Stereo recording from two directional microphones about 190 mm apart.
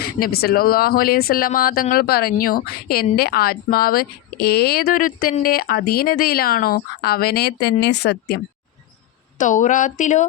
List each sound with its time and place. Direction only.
0.0 s speech: 55° left (ahead or behind)
9.4 s speech: 40° left (ahead or behind)